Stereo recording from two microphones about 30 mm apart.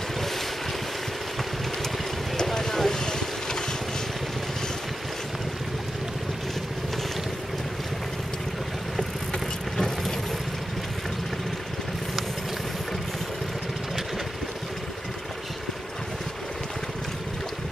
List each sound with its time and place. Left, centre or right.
2.4 s boat: centre
9.8 s vehicle: centre